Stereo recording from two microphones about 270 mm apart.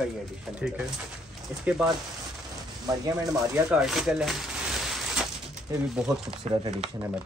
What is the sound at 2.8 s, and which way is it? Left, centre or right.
A man's voice, centre.